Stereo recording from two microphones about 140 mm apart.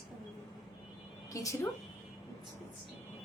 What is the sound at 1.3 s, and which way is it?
Speech, 20° left (ahead or behind).